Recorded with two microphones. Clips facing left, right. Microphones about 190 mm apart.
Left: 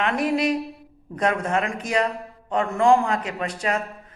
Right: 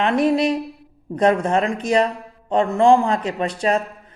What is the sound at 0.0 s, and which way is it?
Speech, 30° right (ahead or behind).